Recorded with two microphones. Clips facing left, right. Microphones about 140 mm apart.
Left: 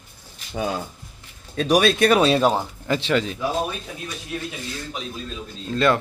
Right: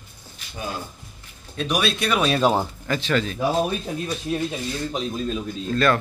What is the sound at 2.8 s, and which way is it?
Speech, 25° left (ahead or behind).